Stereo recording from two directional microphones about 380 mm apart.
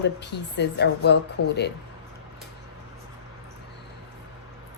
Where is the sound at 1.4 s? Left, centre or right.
Left.